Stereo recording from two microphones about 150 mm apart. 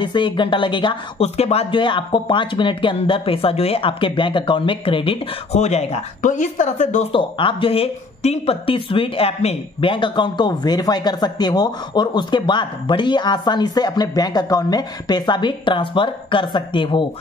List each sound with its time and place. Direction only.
0.0 s speech: 30° left (ahead or behind); by 7.1 s 55° left (ahead or behind)
7.1 s speech: 35° left (ahead or behind)